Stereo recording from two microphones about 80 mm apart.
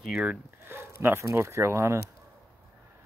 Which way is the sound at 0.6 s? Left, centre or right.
Right.